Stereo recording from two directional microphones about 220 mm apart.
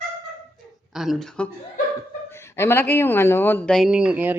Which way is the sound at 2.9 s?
10° left (ahead or behind).